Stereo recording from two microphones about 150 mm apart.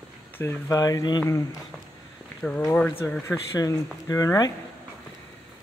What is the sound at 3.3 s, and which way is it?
Speech, 20° left (ahead or behind).